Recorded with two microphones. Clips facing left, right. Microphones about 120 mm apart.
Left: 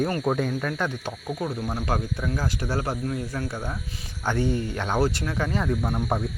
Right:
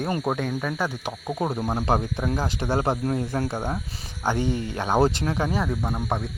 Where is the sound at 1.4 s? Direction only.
35° right (ahead or behind).